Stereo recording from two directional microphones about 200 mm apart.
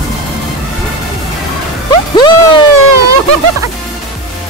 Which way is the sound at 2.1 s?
20° left (ahead or behind).